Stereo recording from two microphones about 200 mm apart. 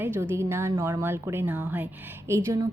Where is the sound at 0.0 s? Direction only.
10° right (ahead or behind).